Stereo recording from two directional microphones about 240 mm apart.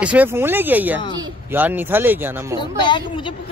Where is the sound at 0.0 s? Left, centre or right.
Centre.